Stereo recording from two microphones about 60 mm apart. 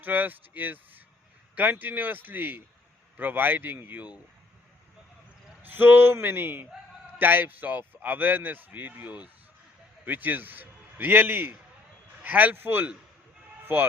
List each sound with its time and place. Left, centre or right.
0.0 s speech: right
5.6 s a man's voice: right